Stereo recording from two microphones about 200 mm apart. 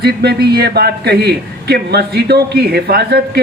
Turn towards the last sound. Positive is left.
turn(degrees=-55)  # may be behind; listen again after turning